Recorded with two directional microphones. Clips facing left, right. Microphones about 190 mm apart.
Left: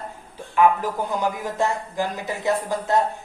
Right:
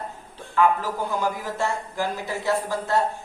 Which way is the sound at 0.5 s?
15° left (ahead or behind).